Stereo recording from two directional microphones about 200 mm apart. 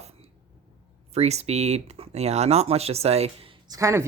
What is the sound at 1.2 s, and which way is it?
Speech, 30° right (ahead or behind).